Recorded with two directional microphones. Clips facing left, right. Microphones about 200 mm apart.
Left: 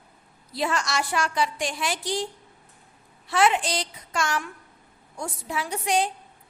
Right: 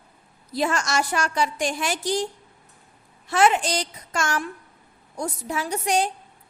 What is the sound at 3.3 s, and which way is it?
A woman's voice, 45° right (ahead or behind).